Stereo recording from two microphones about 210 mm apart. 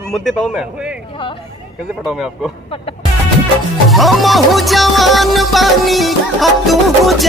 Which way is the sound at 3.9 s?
Centre (ahead or behind).